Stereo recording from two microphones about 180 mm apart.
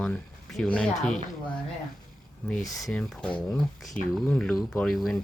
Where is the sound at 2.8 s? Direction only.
5° left (ahead or behind).